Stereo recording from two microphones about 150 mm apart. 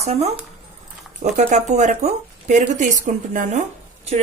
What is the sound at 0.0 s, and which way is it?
A woman's voice, 45° right (ahead or behind).